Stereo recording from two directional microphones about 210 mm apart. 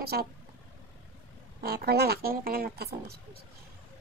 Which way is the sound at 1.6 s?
50° right (ahead or behind).